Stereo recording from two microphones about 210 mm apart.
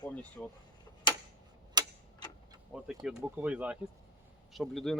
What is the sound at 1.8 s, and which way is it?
Tick-tock, 20° right (ahead or behind).